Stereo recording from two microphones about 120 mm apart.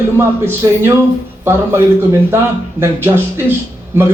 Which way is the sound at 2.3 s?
20° right (ahead or behind).